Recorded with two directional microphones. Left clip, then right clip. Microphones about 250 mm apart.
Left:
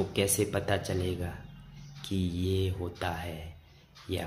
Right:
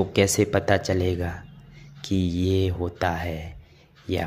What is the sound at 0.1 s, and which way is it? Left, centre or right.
Speech, right.